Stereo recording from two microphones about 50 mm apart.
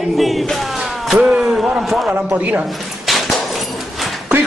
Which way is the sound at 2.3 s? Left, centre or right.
Right.